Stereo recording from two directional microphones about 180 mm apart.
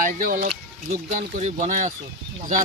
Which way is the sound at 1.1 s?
40° right (ahead or behind).